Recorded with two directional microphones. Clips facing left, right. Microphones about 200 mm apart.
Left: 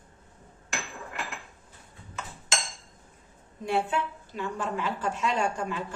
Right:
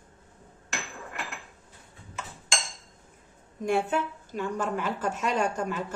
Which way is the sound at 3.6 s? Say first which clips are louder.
Right 2 dB; 45° right (ahead or behind).